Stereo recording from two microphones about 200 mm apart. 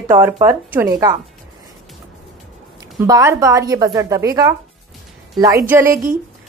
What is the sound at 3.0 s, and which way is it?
A woman's voice, 15° right (ahead or behind).